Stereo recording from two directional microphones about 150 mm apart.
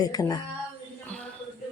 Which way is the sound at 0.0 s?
25° left (ahead or behind).